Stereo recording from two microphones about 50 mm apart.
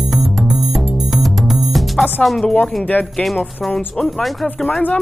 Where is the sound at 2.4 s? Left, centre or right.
Left.